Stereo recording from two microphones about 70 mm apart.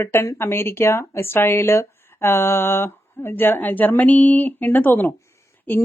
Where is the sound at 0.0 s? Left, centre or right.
Left.